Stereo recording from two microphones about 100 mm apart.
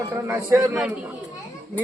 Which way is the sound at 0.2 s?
25° right (ahead or behind).